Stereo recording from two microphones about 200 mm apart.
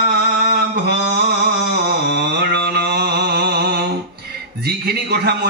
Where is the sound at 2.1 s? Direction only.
55° right (ahead or behind).